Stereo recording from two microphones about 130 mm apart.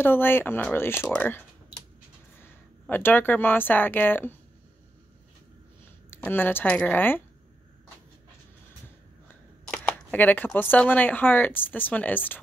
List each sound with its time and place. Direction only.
0.0 s speech: 15° left (ahead or behind)
6.0 s speech: 15° left (ahead or behind)
9.7 s speech: 10° left (ahead or behind)